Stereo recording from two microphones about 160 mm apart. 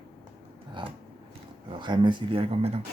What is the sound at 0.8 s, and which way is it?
Speech, 30° right (ahead or behind).